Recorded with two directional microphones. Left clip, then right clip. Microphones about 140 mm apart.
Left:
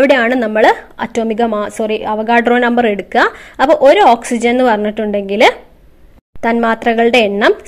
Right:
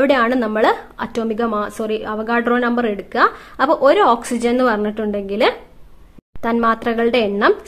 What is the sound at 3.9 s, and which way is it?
A woman's voice, 10° left (ahead or behind).